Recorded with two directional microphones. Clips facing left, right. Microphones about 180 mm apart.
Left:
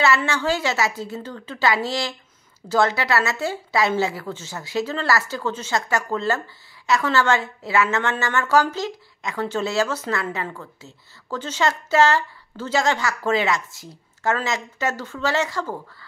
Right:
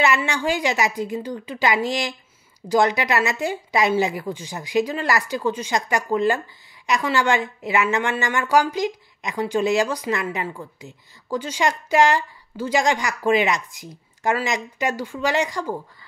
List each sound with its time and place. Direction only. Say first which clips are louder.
0.0 s a woman's voice: even; 15° right (ahead or behind)